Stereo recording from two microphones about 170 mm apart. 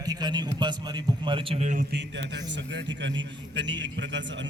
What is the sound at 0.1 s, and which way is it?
A man's voice, 25° right (ahead or behind).